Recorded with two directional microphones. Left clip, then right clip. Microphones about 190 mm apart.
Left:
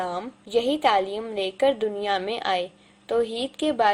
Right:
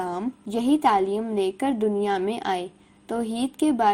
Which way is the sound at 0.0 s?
30° right (ahead or behind).